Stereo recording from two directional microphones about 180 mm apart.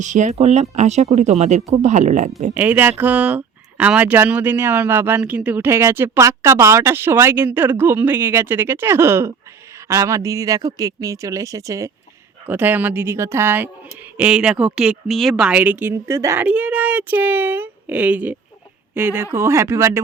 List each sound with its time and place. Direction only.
0.0 s speech: 40° right (ahead or behind)
2.6 s speech: 10° right (ahead or behind)